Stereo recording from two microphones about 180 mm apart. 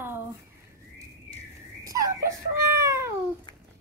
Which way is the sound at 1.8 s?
20° right (ahead or behind).